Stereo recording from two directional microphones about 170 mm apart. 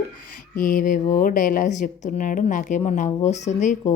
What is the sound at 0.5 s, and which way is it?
Speech, 55° left (ahead or behind).